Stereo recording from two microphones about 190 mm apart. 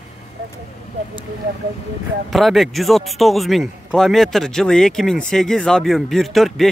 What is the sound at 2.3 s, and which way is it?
A man's voice, centre (ahead or behind).